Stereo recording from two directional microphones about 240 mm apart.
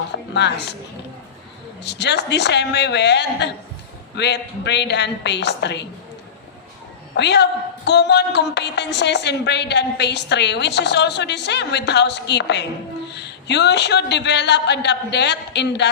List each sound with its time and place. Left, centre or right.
0.3 s a woman's voice: left
1.8 s a woman's voice: left
7.2 s a woman's voice: left